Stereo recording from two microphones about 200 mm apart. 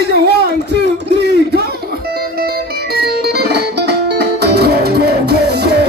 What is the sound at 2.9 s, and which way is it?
Music, 55° right (ahead or behind).